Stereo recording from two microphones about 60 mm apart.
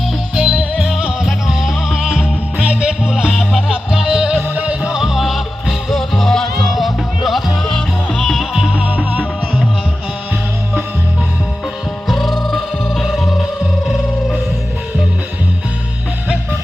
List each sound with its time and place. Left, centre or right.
0.3 s music: centre
4.4 s music: right; by 8.4 s centre
8.7 s music: right
12.0 s music: centre